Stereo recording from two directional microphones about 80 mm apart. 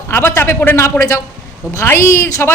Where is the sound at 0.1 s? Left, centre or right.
Left.